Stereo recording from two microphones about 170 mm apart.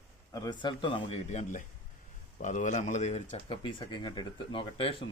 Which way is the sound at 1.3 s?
45° left (ahead or behind).